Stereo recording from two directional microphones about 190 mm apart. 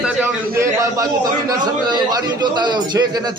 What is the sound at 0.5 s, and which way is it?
A man's voice, 15° right (ahead or behind).